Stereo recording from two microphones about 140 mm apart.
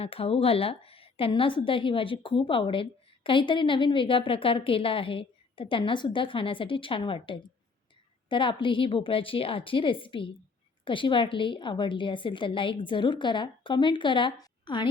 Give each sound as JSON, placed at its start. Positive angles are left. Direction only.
{"t": 0.0, "sound": "a woman's voice", "side_deg": 45}